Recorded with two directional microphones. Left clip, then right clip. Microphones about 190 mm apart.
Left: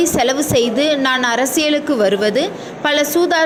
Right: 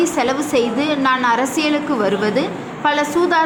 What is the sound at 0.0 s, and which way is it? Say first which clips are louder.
A woman's voice: left 2 dB; 15° left (ahead or behind).